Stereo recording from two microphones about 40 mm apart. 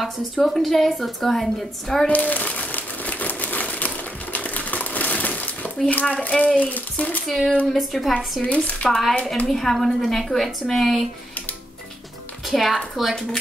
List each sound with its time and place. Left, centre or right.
0.0 s a woman's voice: centre
2.0 s crumpling: left
6.3 s speech: left
7.2 s a woman's voice: centre
12.4 s a woman's voice: centre